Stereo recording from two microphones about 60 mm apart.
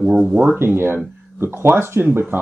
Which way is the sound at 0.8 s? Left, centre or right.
Right.